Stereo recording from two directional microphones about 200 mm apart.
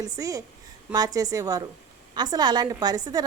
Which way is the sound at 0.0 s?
15° right (ahead or behind).